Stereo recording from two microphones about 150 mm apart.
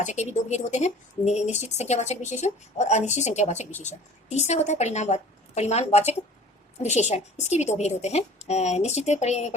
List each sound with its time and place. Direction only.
0.0 s speech: 50° left (ahead or behind)